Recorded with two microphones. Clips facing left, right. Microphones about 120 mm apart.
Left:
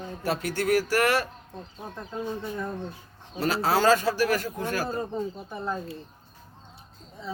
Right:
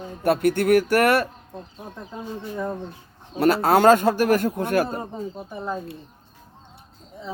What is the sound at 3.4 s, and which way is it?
Speech, 55° right (ahead or behind).